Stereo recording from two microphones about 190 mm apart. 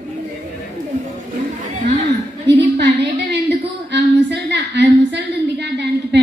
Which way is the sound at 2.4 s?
65° right (ahead or behind).